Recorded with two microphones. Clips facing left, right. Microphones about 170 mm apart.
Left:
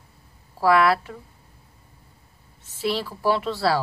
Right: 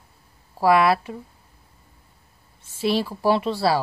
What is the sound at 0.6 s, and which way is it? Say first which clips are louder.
Speech: right 1 dB; 20° right (ahead or behind).